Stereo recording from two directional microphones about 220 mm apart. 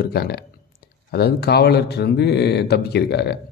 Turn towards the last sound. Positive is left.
turn(degrees=50)  # may be behind; listen again after turning